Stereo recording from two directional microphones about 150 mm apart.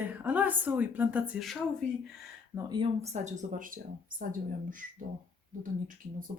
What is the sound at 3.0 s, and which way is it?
Speech, 50° right (ahead or behind).